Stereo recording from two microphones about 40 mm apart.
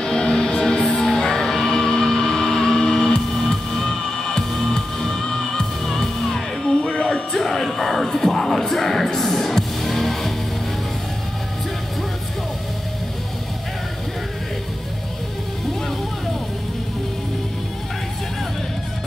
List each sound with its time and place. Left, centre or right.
0.0 s music: centre
4.5 s music: centre
4.7 s music: centre
7.3 s music: centre